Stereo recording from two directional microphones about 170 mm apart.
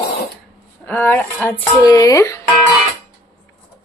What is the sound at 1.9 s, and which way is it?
Speech, 20° left (ahead or behind).